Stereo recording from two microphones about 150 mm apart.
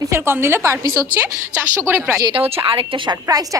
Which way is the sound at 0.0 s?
15° right (ahead or behind).